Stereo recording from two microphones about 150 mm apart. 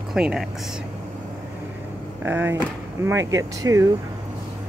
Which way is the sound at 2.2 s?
15° right (ahead or behind).